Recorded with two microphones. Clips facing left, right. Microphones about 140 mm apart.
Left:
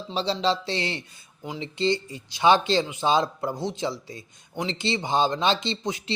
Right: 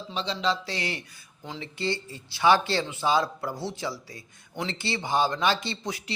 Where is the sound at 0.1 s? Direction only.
35° left (ahead or behind).